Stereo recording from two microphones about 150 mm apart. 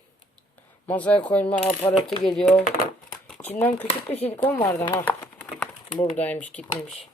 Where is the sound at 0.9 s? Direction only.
10° left (ahead or behind).